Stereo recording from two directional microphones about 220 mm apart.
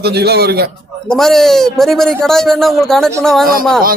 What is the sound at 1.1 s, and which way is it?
A man's voice, centre (ahead or behind).